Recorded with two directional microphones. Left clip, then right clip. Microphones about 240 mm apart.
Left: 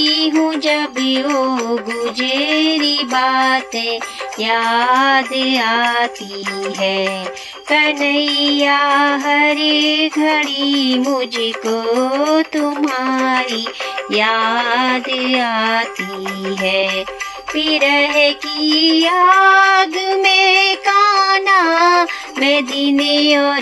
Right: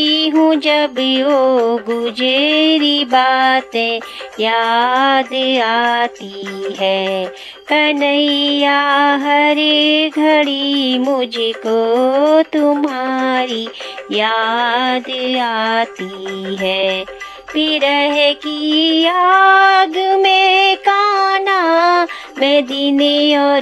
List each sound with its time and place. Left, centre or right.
0.4 s music: right